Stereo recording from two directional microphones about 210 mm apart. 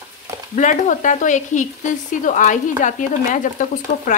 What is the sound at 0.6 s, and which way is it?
Speech, 35° left (ahead or behind).